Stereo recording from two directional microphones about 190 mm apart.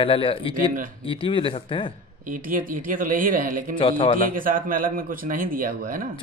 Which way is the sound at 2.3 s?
45° right (ahead or behind).